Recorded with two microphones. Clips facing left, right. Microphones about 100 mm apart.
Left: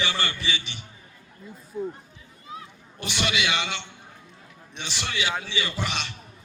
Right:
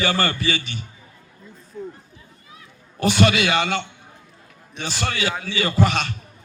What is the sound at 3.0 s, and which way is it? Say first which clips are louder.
A man's voice: right 10 dB; 45° right (ahead or behind).